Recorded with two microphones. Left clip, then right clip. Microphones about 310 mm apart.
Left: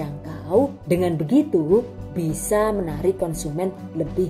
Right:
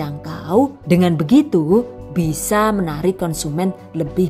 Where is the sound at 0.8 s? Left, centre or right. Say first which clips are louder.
Right 4 dB; right.